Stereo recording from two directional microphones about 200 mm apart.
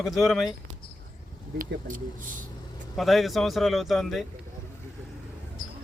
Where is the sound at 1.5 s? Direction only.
40° right (ahead or behind).